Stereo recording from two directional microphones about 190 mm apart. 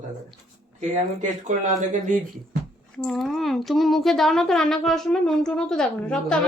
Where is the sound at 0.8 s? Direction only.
40° right (ahead or behind).